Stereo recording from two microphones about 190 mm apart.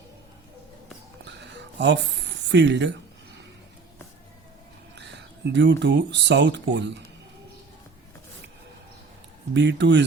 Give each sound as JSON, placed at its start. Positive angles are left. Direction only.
{"t": 1.2, "sound": "music", "side_deg": -70}
{"t": 2.5, "sound": "speech", "side_deg": -65}
{"t": 4.9, "sound": "speech", "side_deg": -65}
{"t": 9.6, "sound": "speech", "side_deg": -70}